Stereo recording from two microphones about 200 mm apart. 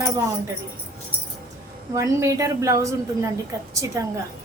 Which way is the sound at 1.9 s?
15° right (ahead or behind).